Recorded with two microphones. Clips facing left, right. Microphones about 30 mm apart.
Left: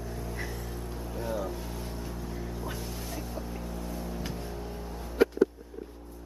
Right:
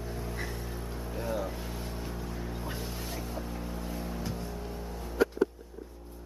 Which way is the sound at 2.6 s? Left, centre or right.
Centre.